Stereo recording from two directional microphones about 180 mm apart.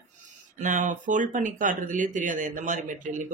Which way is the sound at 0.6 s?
45° right (ahead or behind).